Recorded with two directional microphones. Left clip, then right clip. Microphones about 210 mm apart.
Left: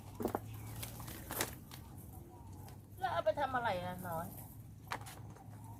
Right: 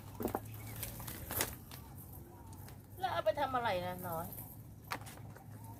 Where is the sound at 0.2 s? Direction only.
5° left (ahead or behind).